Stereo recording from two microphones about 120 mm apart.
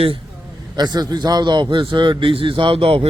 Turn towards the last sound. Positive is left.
turn(degrees=-50)  # may be behind; listen again after turning